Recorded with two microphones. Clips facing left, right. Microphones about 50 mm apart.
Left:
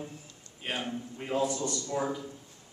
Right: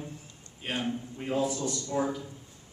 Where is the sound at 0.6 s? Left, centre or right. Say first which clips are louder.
Right 2 dB; centre.